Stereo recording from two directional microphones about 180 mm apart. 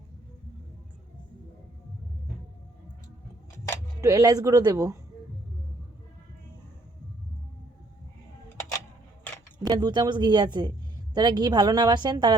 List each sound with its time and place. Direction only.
4.0 s a woman's voice: 20° right (ahead or behind)
9.6 s a woman's voice: 25° right (ahead or behind)